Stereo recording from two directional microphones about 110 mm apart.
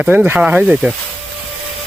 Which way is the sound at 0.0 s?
15° right (ahead or behind).